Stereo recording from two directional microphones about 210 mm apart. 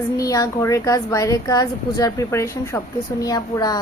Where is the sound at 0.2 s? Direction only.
15° left (ahead or behind).